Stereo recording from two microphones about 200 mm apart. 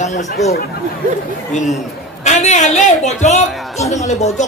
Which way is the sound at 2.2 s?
35° left (ahead or behind).